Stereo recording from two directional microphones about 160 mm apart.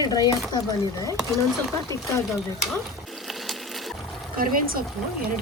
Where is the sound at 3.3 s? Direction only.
Centre (ahead or behind).